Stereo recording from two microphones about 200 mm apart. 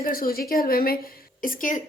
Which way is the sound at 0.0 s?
45° left (ahead or behind).